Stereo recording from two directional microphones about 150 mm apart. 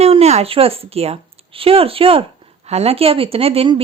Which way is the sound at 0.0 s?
45° right (ahead or behind).